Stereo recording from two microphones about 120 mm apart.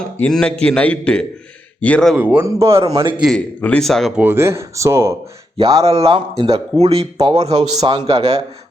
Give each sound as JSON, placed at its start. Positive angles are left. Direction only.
{"t": 0.0, "sound": "a man's voice", "side_deg": 5}
{"t": 2.1, "sound": "speech", "side_deg": -15}
{"t": 2.8, "sound": "a man's voice", "side_deg": -30}
{"t": 3.3, "sound": "speech", "side_deg": 10}
{"t": 4.2, "sound": "a man's voice", "side_deg": -20}
{"t": 5.8, "sound": "speech", "side_deg": -55}
{"t": 7.9, "sound": "a man's voice", "side_deg": -45}